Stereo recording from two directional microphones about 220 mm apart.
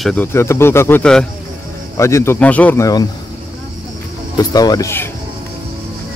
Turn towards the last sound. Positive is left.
turn(degrees=15)  # may be behind; listen again after turning